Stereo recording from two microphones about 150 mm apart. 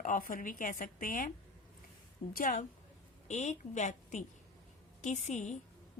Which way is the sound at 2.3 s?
60° left (ahead or behind).